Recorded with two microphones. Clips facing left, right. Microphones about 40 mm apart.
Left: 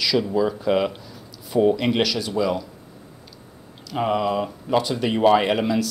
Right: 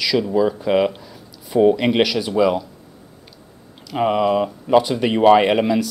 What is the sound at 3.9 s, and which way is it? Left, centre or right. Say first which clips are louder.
Speech: right 4 dB; centre.